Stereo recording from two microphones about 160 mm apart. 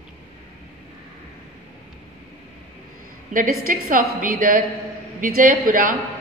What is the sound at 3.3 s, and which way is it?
A woman's voice, 60° right (ahead or behind).